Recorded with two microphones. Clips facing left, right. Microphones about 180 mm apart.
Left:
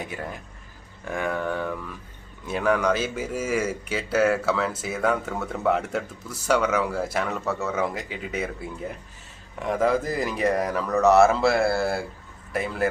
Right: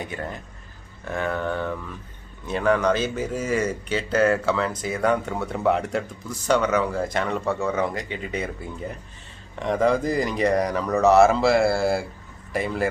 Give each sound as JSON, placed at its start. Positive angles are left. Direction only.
{"t": 0.0, "sound": "speech", "side_deg": 10}